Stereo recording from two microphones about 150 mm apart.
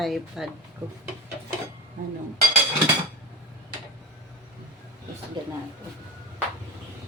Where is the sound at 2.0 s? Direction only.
65° right (ahead or behind).